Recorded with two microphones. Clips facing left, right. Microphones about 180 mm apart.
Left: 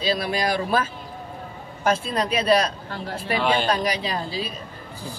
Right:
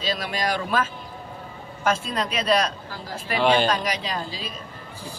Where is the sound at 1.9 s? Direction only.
35° left (ahead or behind).